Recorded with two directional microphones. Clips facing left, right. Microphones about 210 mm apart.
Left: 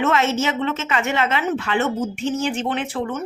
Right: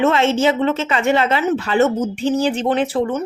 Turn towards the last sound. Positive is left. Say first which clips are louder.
# right 6 dB
turn(degrees=-35)  # may be behind; listen again after turning